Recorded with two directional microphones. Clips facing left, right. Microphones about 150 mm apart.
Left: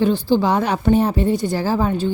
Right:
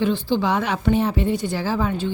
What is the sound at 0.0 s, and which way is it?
Speech, 40° left (ahead or behind).